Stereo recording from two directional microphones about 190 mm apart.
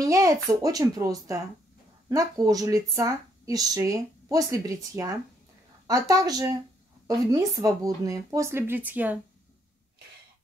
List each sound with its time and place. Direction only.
0.0 s a woman's voice: 15° right (ahead or behind)